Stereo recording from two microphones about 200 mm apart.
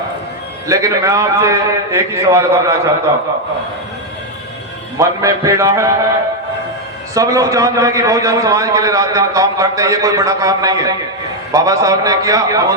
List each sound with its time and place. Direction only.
0.7 s a man's voice: 15° right (ahead or behind)
4.9 s a man's voice: 15° right (ahead or behind)
7.1 s a man's voice: 15° right (ahead or behind)